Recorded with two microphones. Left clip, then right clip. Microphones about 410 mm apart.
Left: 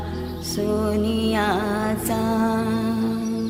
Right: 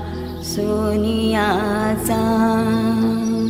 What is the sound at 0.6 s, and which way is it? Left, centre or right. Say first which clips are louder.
Music: right 3 dB; right.